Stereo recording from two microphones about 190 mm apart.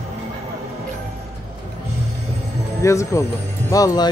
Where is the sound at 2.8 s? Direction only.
15° left (ahead or behind).